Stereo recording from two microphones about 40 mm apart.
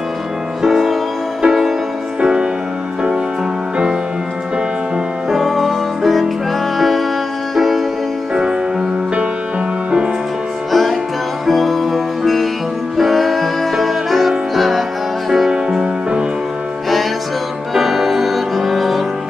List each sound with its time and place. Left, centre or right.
0.6 s music: centre
2.1 s music: right
5.4 s music: centre
10.7 s music: centre
15.5 s music: right
17.7 s music: centre